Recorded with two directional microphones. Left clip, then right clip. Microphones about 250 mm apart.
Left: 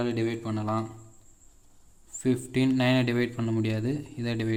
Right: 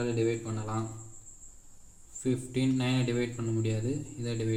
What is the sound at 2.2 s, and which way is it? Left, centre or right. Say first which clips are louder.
Speech: left 4 dB; left.